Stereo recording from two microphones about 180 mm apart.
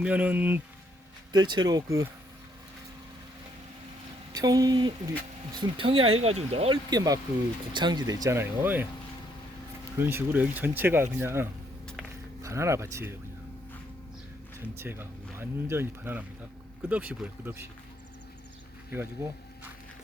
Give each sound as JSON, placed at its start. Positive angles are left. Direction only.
{"t": 0.0, "sound": "speech", "side_deg": -10}
{"t": 1.3, "sound": "speech", "side_deg": -25}
{"t": 4.3, "sound": "speech", "side_deg": -20}
{"t": 6.9, "sound": "speech", "side_deg": -20}
{"t": 10.0, "sound": "speech", "side_deg": -10}
{"t": 14.8, "sound": "speech", "side_deg": -10}
{"t": 18.9, "sound": "speech", "side_deg": -10}